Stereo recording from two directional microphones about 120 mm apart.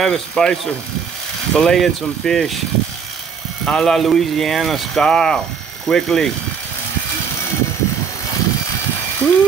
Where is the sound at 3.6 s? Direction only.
5° left (ahead or behind).